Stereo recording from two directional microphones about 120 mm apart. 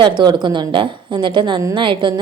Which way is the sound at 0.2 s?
40° right (ahead or behind).